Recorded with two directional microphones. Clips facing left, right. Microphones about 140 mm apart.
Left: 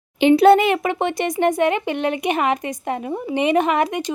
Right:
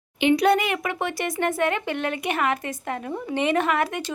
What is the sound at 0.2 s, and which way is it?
Speech, 30° left (ahead or behind).